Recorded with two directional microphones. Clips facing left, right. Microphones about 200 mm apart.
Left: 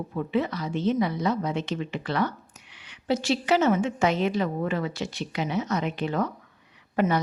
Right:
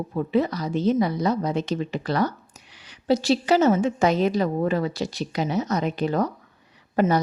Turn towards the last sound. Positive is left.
turn(degrees=-40)  # may be behind; listen again after turning